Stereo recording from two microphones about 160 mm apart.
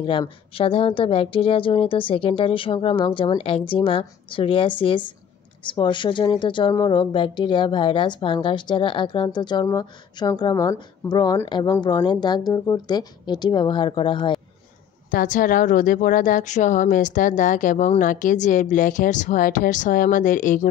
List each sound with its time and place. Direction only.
0.0 s a woman's voice: 30° left (ahead or behind)
15.0 s a woman's voice: 60° left (ahead or behind)